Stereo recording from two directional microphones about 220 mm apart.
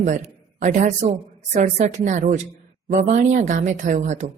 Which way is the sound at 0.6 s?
35° right (ahead or behind).